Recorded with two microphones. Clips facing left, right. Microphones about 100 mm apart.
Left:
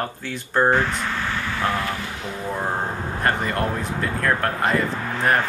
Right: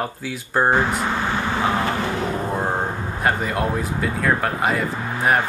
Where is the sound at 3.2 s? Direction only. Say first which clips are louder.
Right 1 dB; 5° right (ahead or behind).